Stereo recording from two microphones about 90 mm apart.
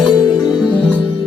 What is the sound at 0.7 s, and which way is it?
Music, 15° left (ahead or behind).